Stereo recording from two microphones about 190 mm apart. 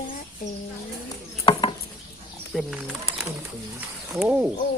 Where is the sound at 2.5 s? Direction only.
Centre (ahead or behind).